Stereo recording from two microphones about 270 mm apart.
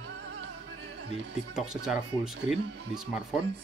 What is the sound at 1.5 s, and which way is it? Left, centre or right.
Speech, centre.